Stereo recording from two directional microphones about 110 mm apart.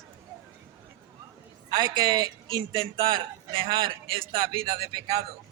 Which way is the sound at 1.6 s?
40° right (ahead or behind).